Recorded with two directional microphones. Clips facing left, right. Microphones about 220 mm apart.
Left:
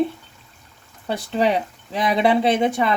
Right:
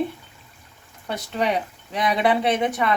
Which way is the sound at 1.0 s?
30° left (ahead or behind).